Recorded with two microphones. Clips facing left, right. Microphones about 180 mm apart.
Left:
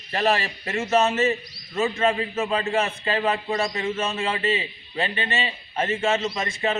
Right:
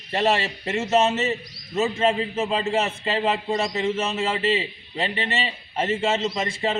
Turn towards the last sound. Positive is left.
turn(degrees=-30)  # may be behind; listen again after turning